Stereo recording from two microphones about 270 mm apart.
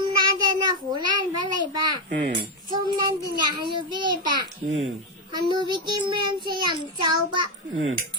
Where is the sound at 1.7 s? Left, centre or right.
Centre.